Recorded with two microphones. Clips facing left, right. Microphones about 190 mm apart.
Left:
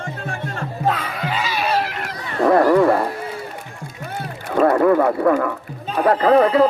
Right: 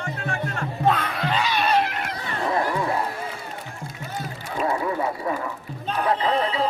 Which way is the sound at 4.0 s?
60° left (ahead or behind).